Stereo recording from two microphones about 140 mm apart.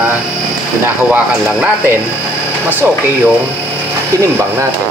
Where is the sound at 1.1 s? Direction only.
10° right (ahead or behind).